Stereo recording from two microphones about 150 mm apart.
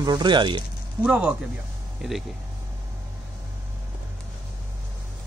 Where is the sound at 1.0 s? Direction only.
10° right (ahead or behind).